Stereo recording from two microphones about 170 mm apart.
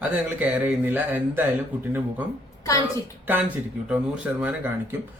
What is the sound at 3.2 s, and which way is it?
Speech, 10° right (ahead or behind).